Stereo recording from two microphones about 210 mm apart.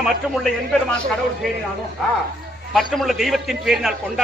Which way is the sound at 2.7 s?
Centre (ahead or behind).